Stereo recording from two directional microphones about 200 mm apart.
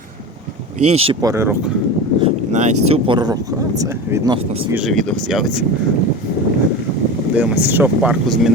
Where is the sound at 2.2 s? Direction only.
35° right (ahead or behind).